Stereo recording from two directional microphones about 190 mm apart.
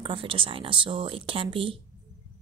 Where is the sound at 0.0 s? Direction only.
30° right (ahead or behind).